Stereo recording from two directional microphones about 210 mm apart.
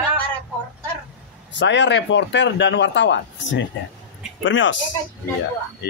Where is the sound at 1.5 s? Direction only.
60° left (ahead or behind).